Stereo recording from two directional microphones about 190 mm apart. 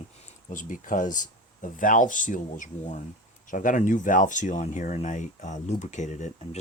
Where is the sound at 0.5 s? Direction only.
45° left (ahead or behind).